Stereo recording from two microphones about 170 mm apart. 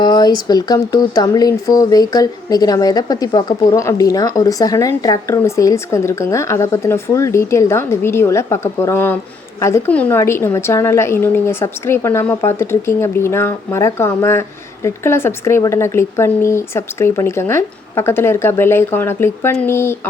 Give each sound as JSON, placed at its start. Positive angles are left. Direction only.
{"t": 0.0, "sound": "speech", "side_deg": 25}